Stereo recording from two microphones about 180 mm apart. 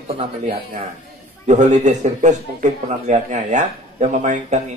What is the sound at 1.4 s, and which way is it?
A man's voice, 40° right (ahead or behind).